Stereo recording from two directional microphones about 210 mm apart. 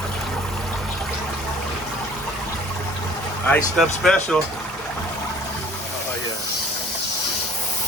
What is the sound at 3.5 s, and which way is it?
Speech, centre (ahead or behind).